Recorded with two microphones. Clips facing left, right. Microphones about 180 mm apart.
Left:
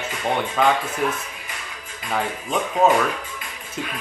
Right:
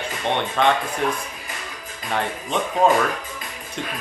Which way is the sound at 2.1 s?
5° left (ahead or behind).